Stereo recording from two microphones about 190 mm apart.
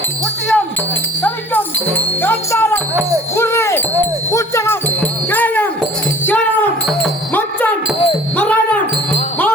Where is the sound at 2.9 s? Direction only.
15° right (ahead or behind).